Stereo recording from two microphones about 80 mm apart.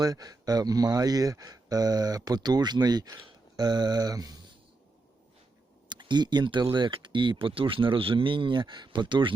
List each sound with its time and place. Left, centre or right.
0.0 s speech: right
5.9 s speech: right